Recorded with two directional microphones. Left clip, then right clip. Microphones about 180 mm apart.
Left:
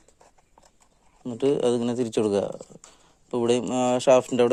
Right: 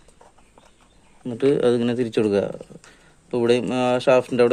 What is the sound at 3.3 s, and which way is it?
Speech, 30° left (ahead or behind).